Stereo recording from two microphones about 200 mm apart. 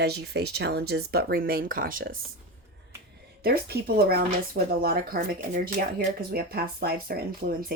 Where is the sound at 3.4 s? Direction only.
50° right (ahead or behind).